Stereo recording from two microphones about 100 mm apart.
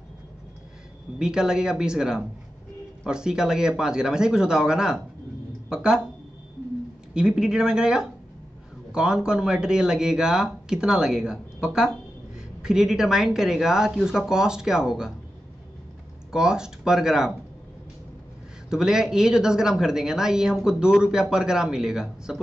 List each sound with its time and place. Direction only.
1.2 s speech: 5° right (ahead or behind)
7.2 s speech: 5° right (ahead or behind)
16.3 s speech: 5° right (ahead or behind)
18.7 s speech: 5° right (ahead or behind)